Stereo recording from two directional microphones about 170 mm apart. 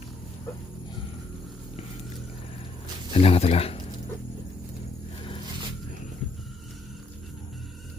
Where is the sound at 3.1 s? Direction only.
35° left (ahead or behind).